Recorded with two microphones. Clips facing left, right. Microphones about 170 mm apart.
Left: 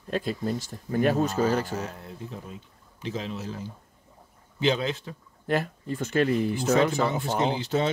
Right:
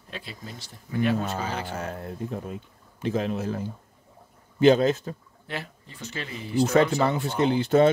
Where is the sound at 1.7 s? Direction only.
55° right (ahead or behind).